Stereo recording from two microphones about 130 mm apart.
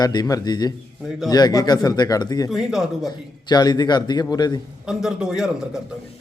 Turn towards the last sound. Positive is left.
turn(degrees=-5)  # may be behind; listen again after turning